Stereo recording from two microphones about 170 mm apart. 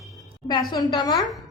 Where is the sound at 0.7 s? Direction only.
25° left (ahead or behind).